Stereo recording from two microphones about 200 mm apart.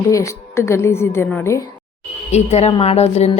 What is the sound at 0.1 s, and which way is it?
A woman's voice, 15° left (ahead or behind).